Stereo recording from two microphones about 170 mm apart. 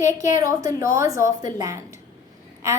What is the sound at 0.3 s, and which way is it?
A woman's voice, 20° right (ahead or behind).